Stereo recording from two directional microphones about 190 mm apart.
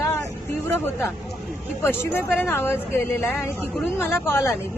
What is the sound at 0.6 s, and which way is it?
Speech, 15° left (ahead or behind).